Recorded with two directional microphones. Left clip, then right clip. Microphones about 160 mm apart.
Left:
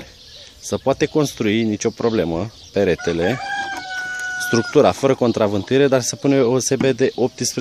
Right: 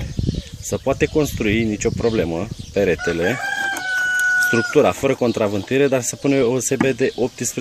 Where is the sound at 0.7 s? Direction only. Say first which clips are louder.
Left 1 dB; 35° left (ahead or behind).